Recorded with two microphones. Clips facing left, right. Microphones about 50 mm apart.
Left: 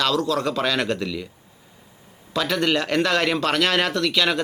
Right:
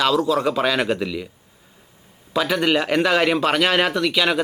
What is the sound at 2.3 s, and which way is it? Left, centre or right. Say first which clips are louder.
Speech: right 2 dB; centre.